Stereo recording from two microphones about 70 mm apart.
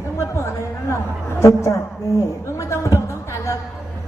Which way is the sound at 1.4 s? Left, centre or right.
Left.